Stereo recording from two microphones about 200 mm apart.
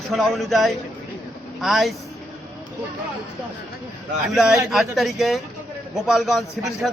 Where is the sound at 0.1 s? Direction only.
Centre (ahead or behind).